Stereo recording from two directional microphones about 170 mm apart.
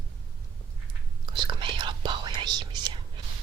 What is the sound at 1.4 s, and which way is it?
Whispering, 25° right (ahead or behind).